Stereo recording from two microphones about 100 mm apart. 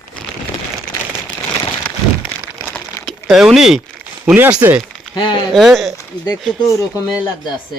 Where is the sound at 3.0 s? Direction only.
30° left (ahead or behind).